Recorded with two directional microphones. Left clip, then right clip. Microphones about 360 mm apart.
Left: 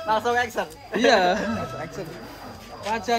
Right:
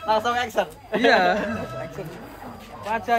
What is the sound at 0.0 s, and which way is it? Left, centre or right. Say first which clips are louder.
Speech: even; right.